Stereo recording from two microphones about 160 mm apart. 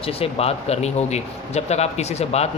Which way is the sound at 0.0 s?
35° left (ahead or behind).